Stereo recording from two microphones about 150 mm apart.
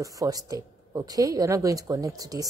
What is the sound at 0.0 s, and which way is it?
Speech, 25° right (ahead or behind).